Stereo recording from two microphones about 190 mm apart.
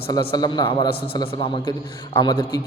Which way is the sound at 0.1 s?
20° left (ahead or behind).